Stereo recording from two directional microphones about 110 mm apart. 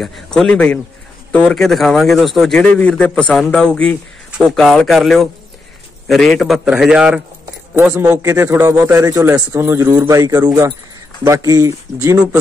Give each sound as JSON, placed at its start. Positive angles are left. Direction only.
{"t": 0.0, "sound": "a man's voice", "side_deg": 5}
{"t": 7.8, "sound": "a man's voice", "side_deg": -20}